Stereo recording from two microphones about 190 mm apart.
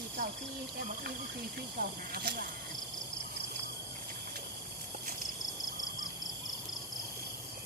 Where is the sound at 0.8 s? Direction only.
55° right (ahead or behind).